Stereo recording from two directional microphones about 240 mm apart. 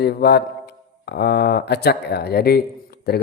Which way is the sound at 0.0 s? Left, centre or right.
Left.